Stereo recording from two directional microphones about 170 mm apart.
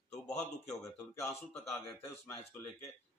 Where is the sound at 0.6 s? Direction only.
15° left (ahead or behind).